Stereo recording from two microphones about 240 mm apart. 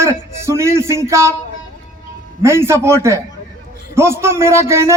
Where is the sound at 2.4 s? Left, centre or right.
Centre.